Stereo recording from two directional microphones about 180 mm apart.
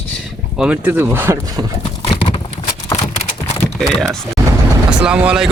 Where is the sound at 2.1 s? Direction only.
25° left (ahead or behind).